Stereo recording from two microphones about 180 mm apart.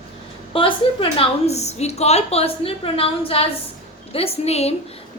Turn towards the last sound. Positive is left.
turn(degrees=35)  # may be behind; listen again after turning